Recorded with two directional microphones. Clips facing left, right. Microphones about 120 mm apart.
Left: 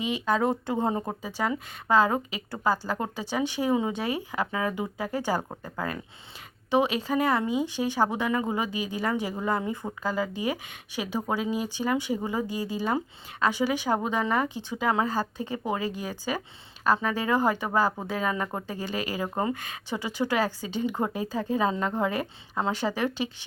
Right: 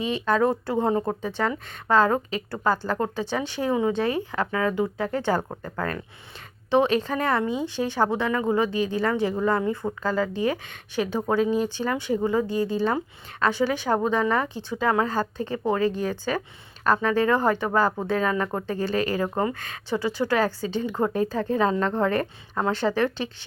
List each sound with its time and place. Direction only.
0.0 s speech: 15° left (ahead or behind)